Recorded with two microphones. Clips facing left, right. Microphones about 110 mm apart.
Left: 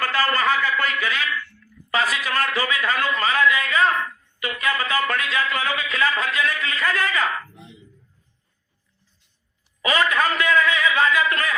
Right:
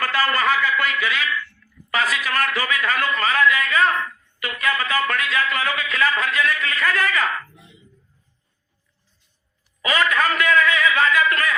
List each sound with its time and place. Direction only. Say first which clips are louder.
0.0 s a sound: right 1 dB; 30° left (ahead or behind)
4.4 s a man's voice: right 1 dB; 15° left (ahead or behind)
9.8 s a man's voice: even; 25° left (ahead or behind)